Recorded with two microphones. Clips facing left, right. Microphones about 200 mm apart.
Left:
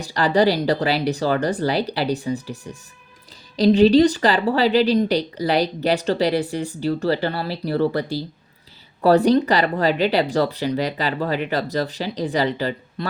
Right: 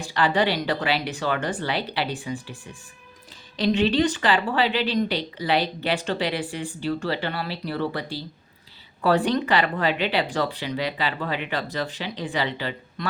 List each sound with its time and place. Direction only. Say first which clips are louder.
0.0 s a woman's voice: left 5 dB; 40° left (ahead or behind)
3.6 s a woman's voice: left 8 dB; 35° left (ahead or behind)